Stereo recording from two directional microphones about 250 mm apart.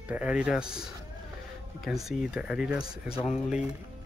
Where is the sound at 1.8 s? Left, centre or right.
Centre.